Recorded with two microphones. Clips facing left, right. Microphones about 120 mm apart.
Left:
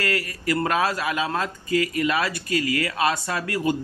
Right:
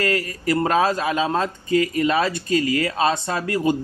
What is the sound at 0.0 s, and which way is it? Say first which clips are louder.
Speech: right 4 dB; 25° right (ahead or behind).